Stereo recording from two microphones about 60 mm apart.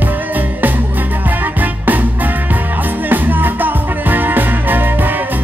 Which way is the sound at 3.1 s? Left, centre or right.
Right.